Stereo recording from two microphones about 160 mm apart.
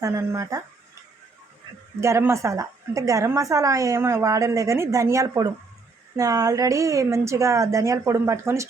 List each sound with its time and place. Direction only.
0.0 s a woman's voice: 15° right (ahead or behind)
2.0 s a woman's voice: 15° right (ahead or behind)